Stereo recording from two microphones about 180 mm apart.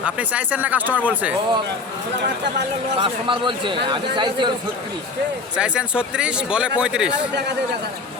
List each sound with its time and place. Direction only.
0.0 s speech: 10° right (ahead or behind)
3.0 s a man's voice: 25° right (ahead or behind)
5.5 s speech: 5° right (ahead or behind)